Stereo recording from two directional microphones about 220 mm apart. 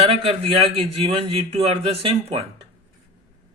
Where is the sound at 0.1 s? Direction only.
25° right (ahead or behind).